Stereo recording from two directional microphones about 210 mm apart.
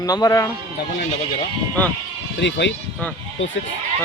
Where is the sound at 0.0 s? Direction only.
15° left (ahead or behind).